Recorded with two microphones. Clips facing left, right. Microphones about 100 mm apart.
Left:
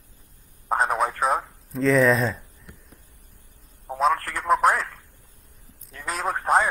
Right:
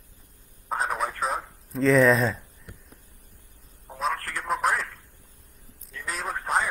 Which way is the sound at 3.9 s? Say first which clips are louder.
Left 7 dB; 55° left (ahead or behind).